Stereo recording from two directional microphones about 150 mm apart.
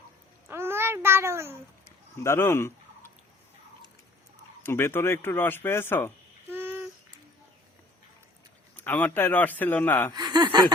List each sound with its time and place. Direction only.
0.4 s a sound: 15° right (ahead or behind)
2.1 s speech: 15° left (ahead or behind)
4.6 s speech: 15° left (ahead or behind)
6.5 s a sound: 15° right (ahead or behind)
8.7 s speech: 10° left (ahead or behind)
10.2 s speech: 30° right (ahead or behind)